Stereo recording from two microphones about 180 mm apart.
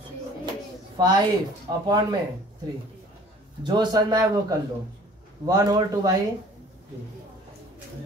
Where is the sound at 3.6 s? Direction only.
20° right (ahead or behind).